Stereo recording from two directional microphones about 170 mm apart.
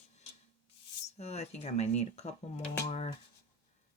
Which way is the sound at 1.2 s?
40° left (ahead or behind).